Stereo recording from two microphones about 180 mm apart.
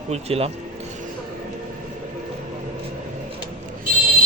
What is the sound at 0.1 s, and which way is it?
Speech, 35° right (ahead or behind).